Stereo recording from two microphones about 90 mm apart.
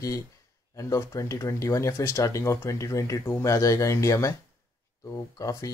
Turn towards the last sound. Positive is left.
turn(degrees=35)  # may be behind; listen again after turning